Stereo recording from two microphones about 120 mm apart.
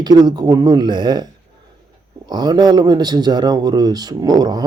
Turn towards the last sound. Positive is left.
turn(degrees=-35)  # may be behind; listen again after turning